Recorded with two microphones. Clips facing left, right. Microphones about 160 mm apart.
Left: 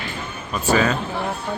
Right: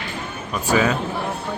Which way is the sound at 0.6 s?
15° right (ahead or behind).